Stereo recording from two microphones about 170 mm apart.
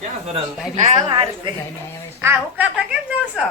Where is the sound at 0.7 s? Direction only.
45° right (ahead or behind).